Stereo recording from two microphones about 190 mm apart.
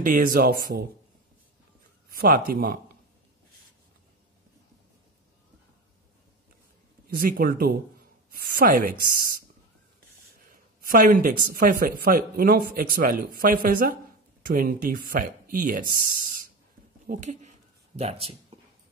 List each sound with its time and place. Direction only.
0.0 s speech: 45° right (ahead or behind)
2.1 s speech: 50° right (ahead or behind)
7.2 s speech: 50° right (ahead or behind)
10.5 s speech: 45° right (ahead or behind)
17.0 s a sound: 40° right (ahead or behind)